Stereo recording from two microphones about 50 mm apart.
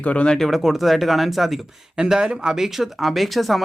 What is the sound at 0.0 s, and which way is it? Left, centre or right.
Speech, left.